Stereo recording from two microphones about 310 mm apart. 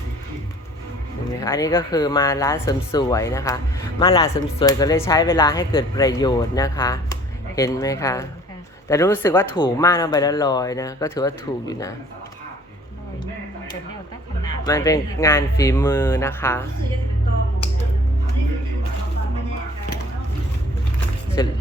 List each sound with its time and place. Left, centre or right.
1.4 s speech: centre
14.4 s speech: centre
21.4 s speech: centre